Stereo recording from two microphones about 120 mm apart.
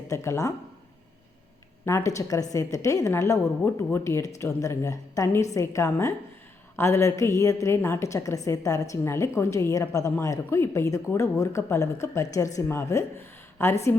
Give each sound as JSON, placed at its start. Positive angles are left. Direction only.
{"t": 0.1, "sound": "a woman's voice", "side_deg": 25}
{"t": 1.8, "sound": "a woman's voice", "side_deg": 25}